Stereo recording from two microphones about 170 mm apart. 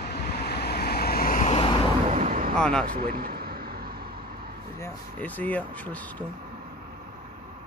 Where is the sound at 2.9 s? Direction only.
60° right (ahead or behind).